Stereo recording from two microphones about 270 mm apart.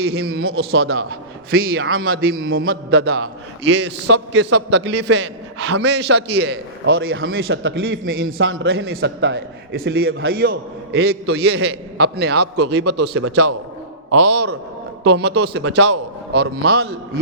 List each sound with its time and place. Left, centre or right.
0.0 s a man's voice: right
8.0 s a man's voice: right
8.4 s a man's voice: right
9.0 s a man's voice: right
10.3 s a man's voice: right
13.2 s a man's voice: right
14.3 s a man's voice: right